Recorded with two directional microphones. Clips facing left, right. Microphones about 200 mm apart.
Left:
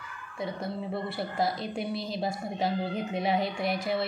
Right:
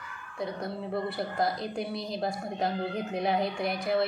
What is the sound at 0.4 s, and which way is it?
A woman's voice, centre (ahead or behind).